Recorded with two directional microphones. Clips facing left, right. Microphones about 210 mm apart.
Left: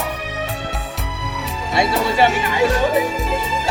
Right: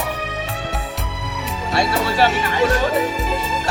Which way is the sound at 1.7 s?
20° left (ahead or behind).